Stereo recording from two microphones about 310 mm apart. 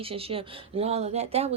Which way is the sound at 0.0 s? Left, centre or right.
Centre.